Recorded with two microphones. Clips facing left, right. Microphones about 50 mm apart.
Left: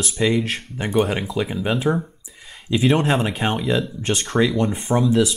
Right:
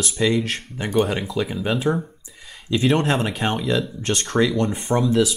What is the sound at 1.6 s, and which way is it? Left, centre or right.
Speech, centre.